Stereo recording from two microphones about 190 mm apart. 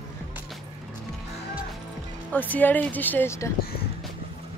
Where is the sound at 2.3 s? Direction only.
10° left (ahead or behind).